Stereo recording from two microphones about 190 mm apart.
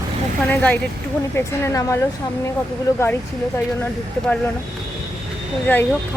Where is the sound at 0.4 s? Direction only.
10° left (ahead or behind).